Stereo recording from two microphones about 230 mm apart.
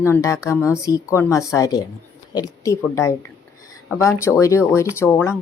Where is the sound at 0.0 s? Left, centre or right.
Centre.